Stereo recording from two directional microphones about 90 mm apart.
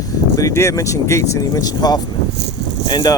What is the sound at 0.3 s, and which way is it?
Speech, 35° left (ahead or behind).